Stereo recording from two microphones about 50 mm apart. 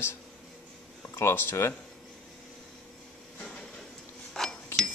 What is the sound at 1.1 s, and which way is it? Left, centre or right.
Wind chime, left.